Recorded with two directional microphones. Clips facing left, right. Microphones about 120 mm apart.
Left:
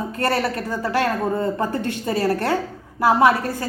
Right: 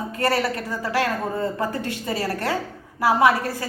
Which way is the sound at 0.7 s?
25° left (ahead or behind).